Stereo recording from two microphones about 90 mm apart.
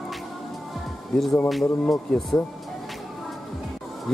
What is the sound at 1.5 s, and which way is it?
Speech, centre (ahead or behind).